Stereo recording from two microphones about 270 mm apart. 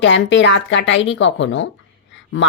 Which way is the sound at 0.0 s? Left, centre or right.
Left.